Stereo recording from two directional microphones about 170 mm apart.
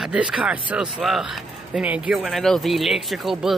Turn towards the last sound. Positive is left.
turn(degrees=0)  # may be behind; listen again after turning